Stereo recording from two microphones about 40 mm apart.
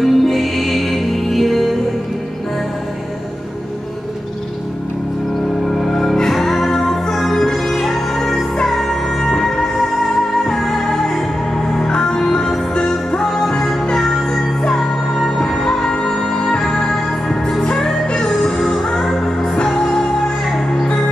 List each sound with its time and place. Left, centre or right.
0.0 s music: centre
5.7 s music: centre